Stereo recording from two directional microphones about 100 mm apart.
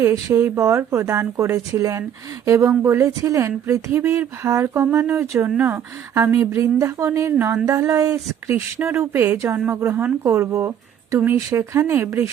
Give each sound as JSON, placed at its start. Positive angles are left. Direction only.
{"t": 0.3, "sound": "speech", "side_deg": -25}